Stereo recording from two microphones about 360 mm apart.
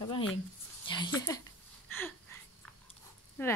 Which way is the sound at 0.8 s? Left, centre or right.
Centre.